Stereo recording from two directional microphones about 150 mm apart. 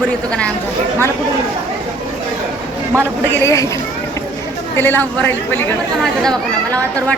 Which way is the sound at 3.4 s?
20° left (ahead or behind).